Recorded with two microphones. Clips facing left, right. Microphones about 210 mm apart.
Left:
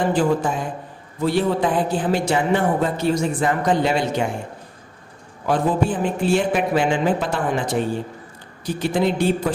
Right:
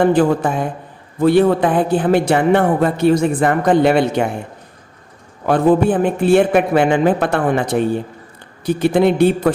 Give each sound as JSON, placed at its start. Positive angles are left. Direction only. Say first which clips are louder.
{"t": 0.0, "sound": "speech", "louder": "right 5 dB", "side_deg": -60}
{"t": 5.5, "sound": "speech", "louder": "right 7 dB", "side_deg": -60}